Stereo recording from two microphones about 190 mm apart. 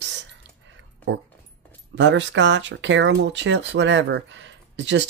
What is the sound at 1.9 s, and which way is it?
Speech, 70° right (ahead or behind).